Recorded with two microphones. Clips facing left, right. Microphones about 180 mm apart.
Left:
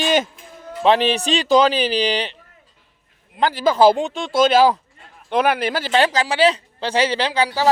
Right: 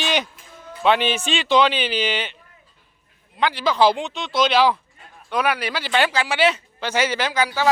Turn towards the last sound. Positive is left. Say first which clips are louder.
# left 2 dB
turn(degrees=35)  # may be behind; listen again after turning